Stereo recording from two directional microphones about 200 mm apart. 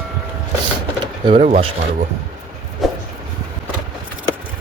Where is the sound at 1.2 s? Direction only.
30° right (ahead or behind).